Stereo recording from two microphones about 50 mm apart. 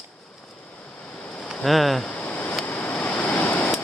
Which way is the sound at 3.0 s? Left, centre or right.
Left.